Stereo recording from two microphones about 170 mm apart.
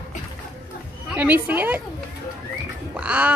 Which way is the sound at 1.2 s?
10° right (ahead or behind).